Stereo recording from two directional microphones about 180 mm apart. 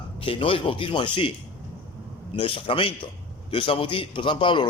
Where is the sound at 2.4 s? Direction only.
30° left (ahead or behind).